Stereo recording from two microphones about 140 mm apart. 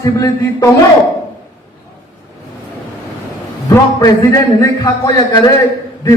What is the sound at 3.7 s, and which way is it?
A man's voice, 25° left (ahead or behind).